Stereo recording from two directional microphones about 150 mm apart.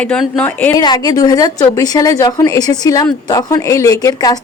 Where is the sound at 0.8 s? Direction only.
25° left (ahead or behind).